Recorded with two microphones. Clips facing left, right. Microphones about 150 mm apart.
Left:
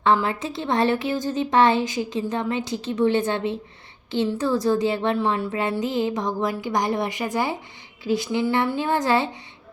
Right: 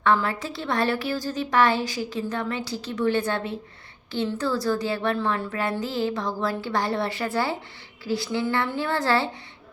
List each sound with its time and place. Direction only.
0.0 s a woman's voice: 20° left (ahead or behind)